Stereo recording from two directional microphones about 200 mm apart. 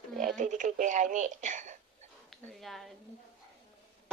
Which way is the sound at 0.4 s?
40° right (ahead or behind).